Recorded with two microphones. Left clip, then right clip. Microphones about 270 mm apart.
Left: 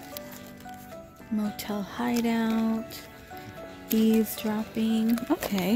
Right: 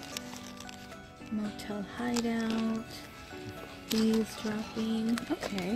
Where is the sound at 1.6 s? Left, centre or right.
Centre.